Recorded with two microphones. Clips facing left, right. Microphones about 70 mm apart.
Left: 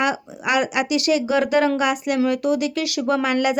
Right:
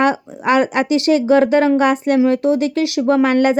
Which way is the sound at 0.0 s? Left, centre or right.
Right.